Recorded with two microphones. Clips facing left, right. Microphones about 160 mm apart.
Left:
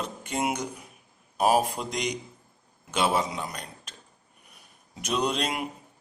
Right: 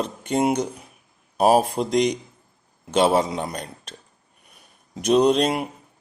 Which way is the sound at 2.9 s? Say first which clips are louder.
Right 7 dB; 35° right (ahead or behind).